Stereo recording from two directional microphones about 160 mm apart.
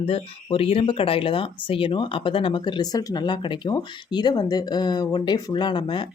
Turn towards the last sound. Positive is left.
turn(degrees=30)  # may be behind; listen again after turning